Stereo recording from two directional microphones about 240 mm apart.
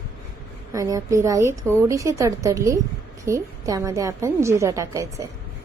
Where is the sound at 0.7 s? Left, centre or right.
Centre.